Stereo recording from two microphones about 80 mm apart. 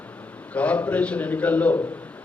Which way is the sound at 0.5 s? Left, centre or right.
Centre.